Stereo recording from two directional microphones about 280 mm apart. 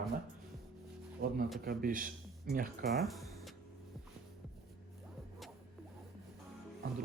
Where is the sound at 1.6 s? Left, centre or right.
Right.